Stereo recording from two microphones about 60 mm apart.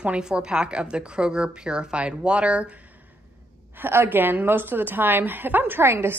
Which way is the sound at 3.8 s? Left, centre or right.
Right.